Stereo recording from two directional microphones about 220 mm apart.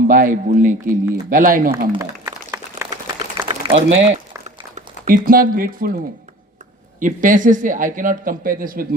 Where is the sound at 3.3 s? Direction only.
25° right (ahead or behind).